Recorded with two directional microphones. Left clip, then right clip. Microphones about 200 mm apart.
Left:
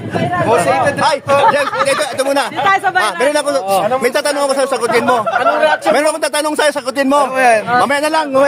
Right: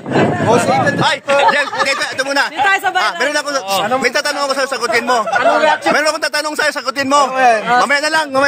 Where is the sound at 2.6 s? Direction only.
60° right (ahead or behind).